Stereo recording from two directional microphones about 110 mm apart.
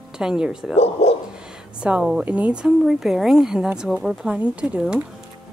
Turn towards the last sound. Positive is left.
turn(degrees=-10)  # may be behind; listen again after turning